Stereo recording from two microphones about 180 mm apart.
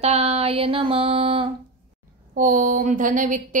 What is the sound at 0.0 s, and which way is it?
Speech, 35° right (ahead or behind).